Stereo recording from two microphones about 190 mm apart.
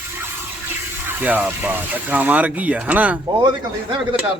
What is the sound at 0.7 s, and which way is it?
Speech, 10° right (ahead or behind).